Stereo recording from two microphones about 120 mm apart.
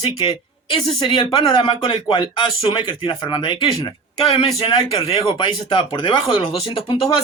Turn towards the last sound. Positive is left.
turn(degrees=45)  # may be behind; listen again after turning